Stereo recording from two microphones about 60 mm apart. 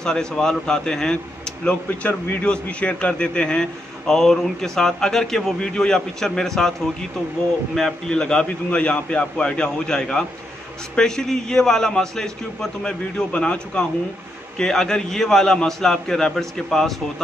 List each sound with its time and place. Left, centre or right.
0.0 s a man's voice: centre
8.1 s a man's voice: centre